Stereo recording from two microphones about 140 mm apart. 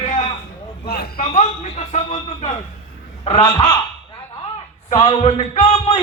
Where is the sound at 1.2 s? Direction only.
50° left (ahead or behind).